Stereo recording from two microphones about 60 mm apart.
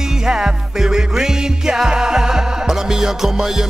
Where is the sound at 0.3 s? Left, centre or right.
Centre.